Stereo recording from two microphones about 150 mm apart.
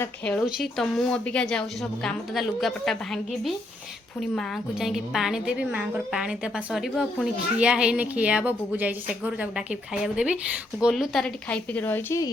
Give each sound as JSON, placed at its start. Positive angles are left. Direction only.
{"t": 0.0, "sound": "a woman's voice", "side_deg": 10}
{"t": 11.4, "sound": "a woman's voice", "side_deg": 10}